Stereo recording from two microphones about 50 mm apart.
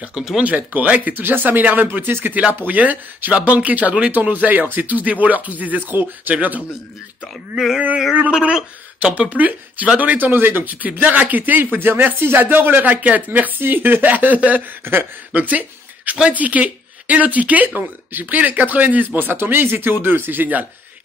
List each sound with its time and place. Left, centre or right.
0.1 s speech: centre
0.7 s speech: right
8.3 s speech: centre
9.2 s speech: right
14.8 s speech: right
15.3 s speech: right
19.1 s speech: right